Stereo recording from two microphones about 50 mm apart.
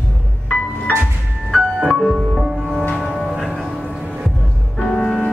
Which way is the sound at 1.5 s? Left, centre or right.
Centre.